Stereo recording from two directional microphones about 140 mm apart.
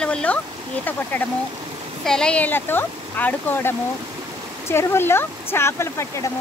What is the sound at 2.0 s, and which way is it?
Speech, 5° left (ahead or behind).